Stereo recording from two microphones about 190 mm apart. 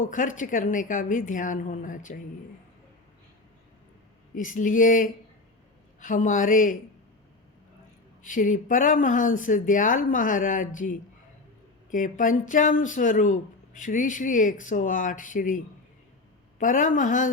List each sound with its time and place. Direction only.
0.0 s speech: 45° left (ahead or behind)
4.4 s speech: 45° left (ahead or behind)
8.2 s speech: 45° left (ahead or behind)
11.9 s speech: 45° left (ahead or behind)